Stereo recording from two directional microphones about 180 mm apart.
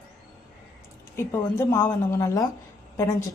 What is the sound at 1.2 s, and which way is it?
A woman's voice, 15° left (ahead or behind).